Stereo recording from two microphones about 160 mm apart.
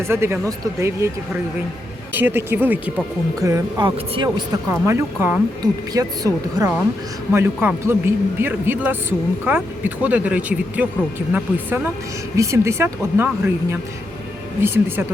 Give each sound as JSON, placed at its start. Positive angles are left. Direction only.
{"t": 0.0, "sound": "speech", "side_deg": -15}
{"t": 2.1, "sound": "speech", "side_deg": -15}
{"t": 3.4, "sound": "speech", "side_deg": -25}
{"t": 4.5, "sound": "speech", "side_deg": -15}